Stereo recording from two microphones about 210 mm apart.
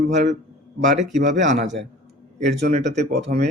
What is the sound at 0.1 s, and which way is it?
Speech, 35° right (ahead or behind).